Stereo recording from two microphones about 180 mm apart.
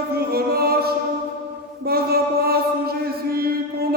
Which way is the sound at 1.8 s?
60° right (ahead or behind).